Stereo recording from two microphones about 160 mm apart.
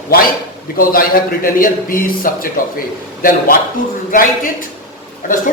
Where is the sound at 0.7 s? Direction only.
65° left (ahead or behind).